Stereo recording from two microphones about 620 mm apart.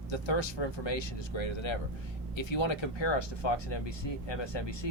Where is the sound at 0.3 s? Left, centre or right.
Left.